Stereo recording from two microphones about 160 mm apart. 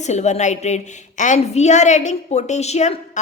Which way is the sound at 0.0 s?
45° left (ahead or behind).